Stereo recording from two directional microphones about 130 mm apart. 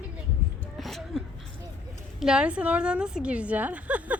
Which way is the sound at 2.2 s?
5° right (ahead or behind).